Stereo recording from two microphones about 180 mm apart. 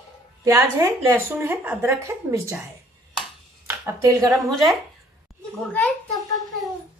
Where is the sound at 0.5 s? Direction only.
15° right (ahead or behind).